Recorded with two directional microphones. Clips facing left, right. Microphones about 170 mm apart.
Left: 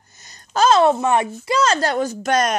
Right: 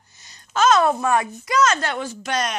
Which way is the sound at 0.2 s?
45° left (ahead or behind).